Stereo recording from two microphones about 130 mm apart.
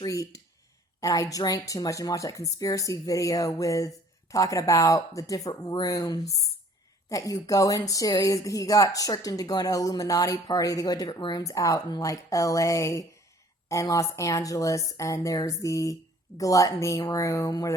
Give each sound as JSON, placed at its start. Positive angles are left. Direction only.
{"t": 0.0, "sound": "speech", "side_deg": 25}